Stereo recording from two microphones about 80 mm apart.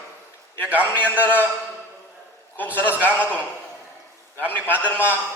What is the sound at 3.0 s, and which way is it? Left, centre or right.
A man's voice, left.